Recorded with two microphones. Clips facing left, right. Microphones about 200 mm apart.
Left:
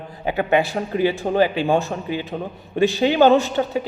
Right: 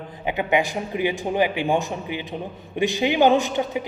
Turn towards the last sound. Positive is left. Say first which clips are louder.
# left 2 dB
turn(degrees=-15)  # may be behind; listen again after turning